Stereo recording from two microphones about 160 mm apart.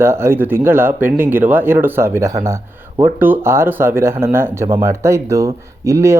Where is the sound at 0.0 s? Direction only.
15° right (ahead or behind).